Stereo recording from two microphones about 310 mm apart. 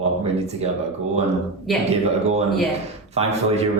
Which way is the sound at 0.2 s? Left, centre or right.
Centre.